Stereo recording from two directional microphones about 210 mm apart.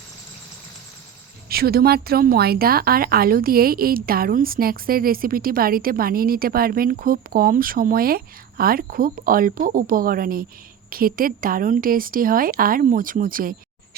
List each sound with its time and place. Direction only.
1.5 s speech: 45° right (ahead or behind)